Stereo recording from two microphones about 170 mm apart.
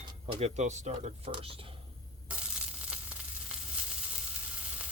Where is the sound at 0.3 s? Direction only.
40° right (ahead or behind).